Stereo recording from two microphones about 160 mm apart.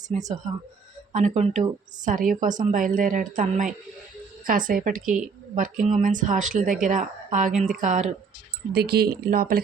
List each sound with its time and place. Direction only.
0.1 s speech: 45° right (ahead or behind)
2.0 s a woman's voice: 55° right (ahead or behind)
8.7 s speech: 80° right